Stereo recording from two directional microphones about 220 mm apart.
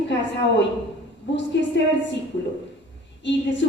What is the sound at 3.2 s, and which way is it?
Speech, 55° left (ahead or behind).